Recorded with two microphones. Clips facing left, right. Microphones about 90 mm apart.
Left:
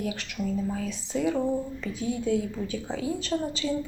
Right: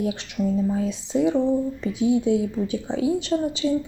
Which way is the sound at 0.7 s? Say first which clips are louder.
Right 7 dB; 25° right (ahead or behind).